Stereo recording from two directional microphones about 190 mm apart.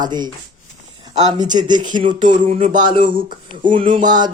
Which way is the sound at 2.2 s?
45° right (ahead or behind).